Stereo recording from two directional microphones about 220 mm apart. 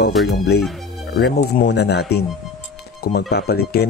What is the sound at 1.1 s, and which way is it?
Speech, 50° left (ahead or behind).